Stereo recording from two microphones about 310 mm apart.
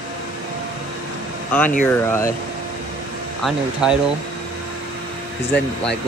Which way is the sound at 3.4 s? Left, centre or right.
Centre.